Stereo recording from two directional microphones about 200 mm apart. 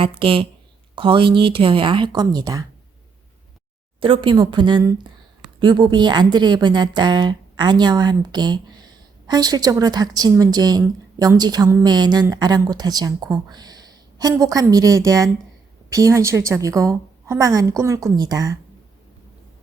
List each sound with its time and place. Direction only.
0.0 s a woman's voice: 25° right (ahead or behind)
4.0 s a woman's voice: 25° right (ahead or behind)